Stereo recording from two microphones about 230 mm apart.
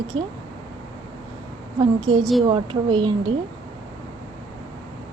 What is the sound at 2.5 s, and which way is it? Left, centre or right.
Speech, right.